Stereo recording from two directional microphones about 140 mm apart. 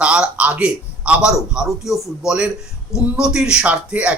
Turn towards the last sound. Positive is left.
turn(degrees=-10)  # may be behind; listen again after turning